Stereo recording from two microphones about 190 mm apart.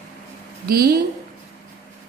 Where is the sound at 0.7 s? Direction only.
55° right (ahead or behind).